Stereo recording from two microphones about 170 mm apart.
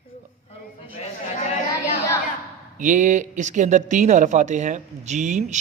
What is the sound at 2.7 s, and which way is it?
Speech, 50° right (ahead or behind).